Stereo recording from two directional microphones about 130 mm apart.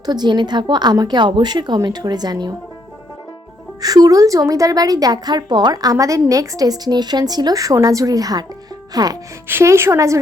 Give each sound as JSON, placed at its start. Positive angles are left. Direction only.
{"t": 0.0, "sound": "a woman's voice", "side_deg": -35}
{"t": 3.8, "sound": "a woman's voice", "side_deg": -30}
{"t": 9.5, "sound": "a woman's voice", "side_deg": -20}